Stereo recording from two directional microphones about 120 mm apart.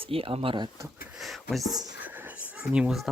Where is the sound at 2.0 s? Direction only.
15° right (ahead or behind).